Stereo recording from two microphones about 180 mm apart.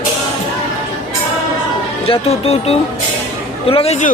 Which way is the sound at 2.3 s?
35° left (ahead or behind).